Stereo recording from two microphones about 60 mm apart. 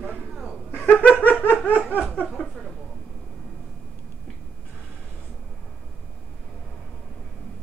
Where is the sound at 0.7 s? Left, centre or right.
Left.